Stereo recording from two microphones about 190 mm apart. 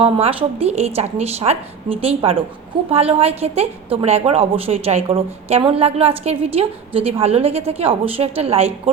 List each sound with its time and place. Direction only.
0.0 s a woman's voice: 30° right (ahead or behind)